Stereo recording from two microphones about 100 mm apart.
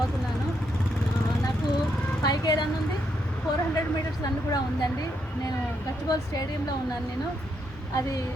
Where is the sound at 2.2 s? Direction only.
45° left (ahead or behind).